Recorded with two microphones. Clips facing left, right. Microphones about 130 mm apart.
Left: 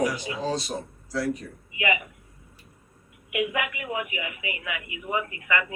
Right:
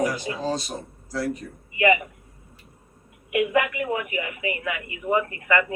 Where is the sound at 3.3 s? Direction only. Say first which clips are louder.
Right 6 dB; 45° right (ahead or behind).